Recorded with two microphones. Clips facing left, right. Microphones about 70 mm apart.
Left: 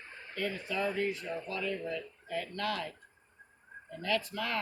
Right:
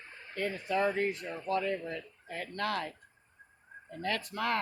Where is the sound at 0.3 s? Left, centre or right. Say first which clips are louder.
Right 3 dB; right.